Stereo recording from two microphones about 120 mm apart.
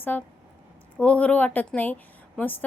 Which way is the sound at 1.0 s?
10° left (ahead or behind).